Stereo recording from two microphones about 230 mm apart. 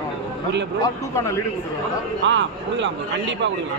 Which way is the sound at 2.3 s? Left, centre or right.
Right.